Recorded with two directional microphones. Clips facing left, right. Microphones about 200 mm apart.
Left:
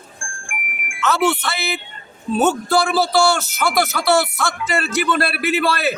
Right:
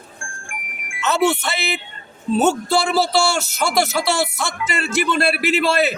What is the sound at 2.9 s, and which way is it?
A man's voice, 25° right (ahead or behind).